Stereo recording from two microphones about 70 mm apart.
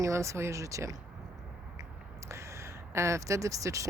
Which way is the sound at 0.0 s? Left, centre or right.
Right.